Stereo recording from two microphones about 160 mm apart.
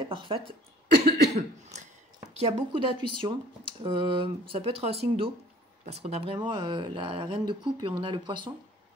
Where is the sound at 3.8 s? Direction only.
30° right (ahead or behind).